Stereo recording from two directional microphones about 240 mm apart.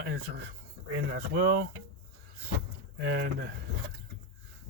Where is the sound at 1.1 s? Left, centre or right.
Right.